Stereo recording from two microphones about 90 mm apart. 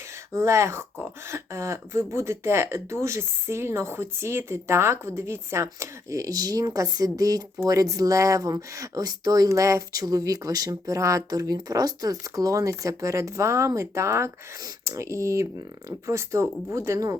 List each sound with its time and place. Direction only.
0.3 s speech: 35° right (ahead or behind)